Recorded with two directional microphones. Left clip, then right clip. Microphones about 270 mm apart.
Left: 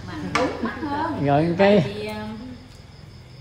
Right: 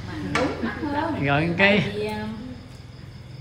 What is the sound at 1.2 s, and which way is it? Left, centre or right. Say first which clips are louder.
Speech: left 2 dB; centre.